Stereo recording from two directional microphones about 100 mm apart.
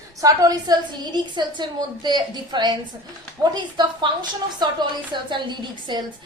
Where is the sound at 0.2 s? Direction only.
40° right (ahead or behind).